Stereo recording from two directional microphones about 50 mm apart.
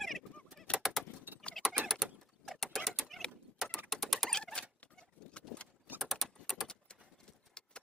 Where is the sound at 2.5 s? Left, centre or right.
Centre.